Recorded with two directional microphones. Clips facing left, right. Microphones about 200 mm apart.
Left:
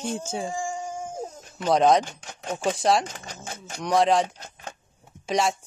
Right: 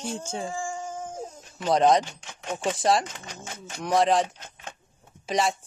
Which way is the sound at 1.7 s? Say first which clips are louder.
Left 1 dB; centre (ahead or behind).